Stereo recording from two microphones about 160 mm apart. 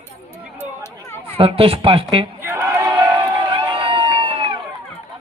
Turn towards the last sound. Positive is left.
turn(degrees=-35)  # may be behind; listen again after turning